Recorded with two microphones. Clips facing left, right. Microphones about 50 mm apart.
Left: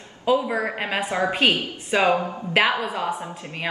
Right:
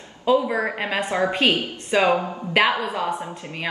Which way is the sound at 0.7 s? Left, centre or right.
Centre.